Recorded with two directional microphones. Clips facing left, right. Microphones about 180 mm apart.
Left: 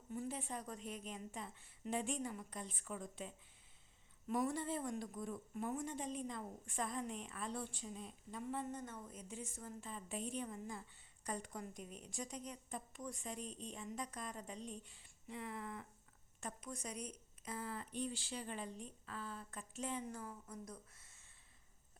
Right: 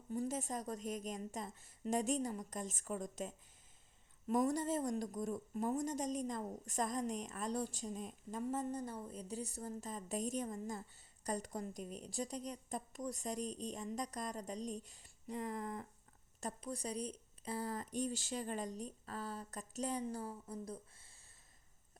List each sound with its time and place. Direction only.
0.1 s a woman's voice: 40° right (ahead or behind)